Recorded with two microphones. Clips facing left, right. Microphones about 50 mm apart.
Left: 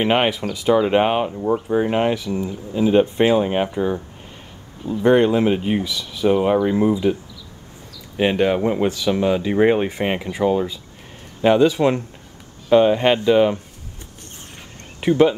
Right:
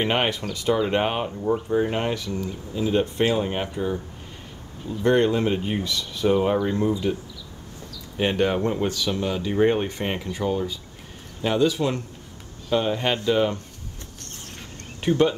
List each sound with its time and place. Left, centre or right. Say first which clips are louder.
0.0 s speech: left 5 dB; centre
5.0 s speech: left 5 dB; centre
8.2 s speech: left 4 dB; centre
15.0 s speech: left 5 dB; centre